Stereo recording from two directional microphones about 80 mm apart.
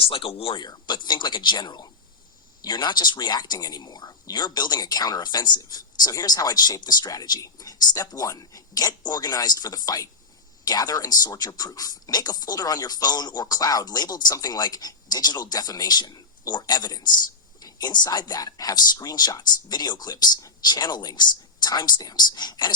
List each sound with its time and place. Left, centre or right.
0.1 s speech: left